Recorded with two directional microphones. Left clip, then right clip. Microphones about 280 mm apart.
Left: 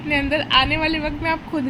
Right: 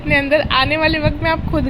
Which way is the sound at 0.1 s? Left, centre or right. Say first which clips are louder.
Right 4 dB; centre.